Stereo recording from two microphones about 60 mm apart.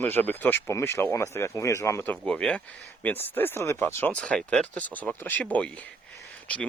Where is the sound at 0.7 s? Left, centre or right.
Left.